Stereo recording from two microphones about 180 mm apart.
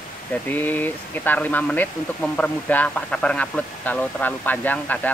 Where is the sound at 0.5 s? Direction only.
10° left (ahead or behind).